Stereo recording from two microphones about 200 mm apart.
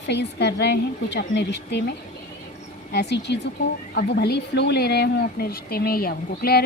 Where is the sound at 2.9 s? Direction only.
55° left (ahead or behind).